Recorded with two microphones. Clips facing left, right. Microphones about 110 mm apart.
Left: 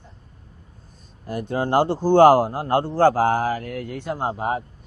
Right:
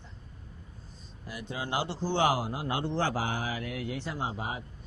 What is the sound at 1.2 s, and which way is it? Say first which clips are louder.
Speech: left 12 dB; 50° left (ahead or behind).